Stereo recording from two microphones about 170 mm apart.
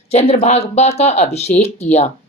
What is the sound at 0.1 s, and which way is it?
Speech, 35° left (ahead or behind).